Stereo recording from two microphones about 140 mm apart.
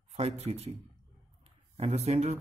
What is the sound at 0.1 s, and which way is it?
Speech, 50° right (ahead or behind).